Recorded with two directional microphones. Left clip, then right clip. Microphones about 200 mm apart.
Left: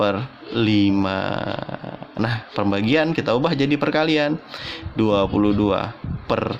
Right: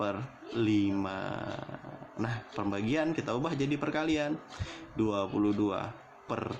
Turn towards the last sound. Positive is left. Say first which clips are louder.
# left 14 dB
turn(degrees=45)  # may be behind; listen again after turning